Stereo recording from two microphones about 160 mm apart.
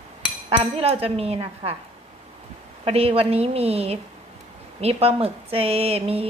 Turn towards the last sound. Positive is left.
turn(degrees=-40)  # may be behind; listen again after turning